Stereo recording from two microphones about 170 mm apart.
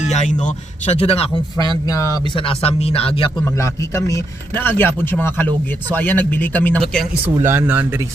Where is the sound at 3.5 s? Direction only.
15° left (ahead or behind).